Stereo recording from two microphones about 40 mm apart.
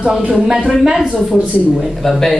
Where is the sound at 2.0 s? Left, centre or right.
Centre.